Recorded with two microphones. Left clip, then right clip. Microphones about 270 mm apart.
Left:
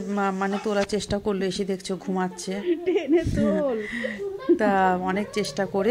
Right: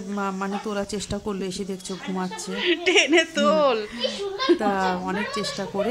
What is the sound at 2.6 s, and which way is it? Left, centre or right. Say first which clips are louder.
Speech: right 6 dB; right.